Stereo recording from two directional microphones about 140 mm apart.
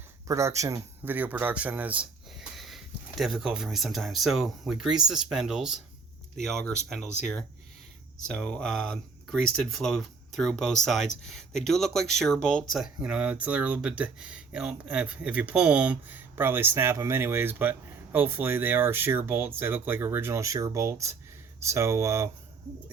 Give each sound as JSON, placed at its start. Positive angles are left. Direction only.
{"t": 0.3, "sound": "speech", "side_deg": -20}
{"t": 1.1, "sound": "a man's voice", "side_deg": -10}
{"t": 8.3, "sound": "a man's voice", "side_deg": 5}